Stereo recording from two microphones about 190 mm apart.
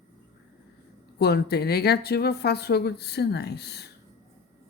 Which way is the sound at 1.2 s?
60° left (ahead or behind).